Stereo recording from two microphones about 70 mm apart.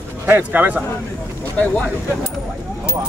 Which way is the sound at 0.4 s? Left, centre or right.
Right.